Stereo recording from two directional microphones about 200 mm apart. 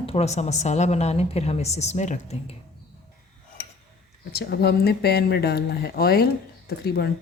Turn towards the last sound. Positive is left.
turn(degrees=50)  # may be behind; listen again after turning